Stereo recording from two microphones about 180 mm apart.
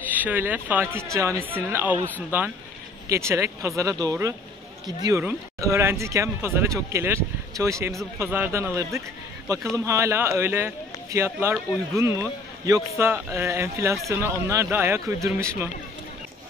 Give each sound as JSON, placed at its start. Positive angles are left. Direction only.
{"t": 0.1, "sound": "speech", "side_deg": -10}